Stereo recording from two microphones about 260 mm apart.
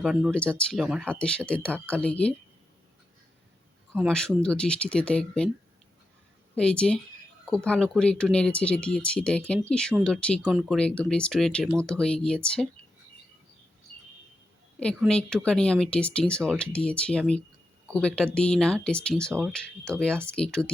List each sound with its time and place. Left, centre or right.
0.0 s speech: centre
4.1 s speech: centre
6.6 s speech: centre
14.8 s speech: centre